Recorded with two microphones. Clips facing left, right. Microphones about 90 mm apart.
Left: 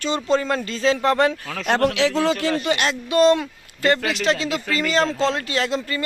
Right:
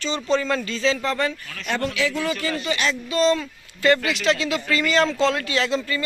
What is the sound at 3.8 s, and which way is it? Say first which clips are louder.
A man's voice: even; 40° left (ahead or behind).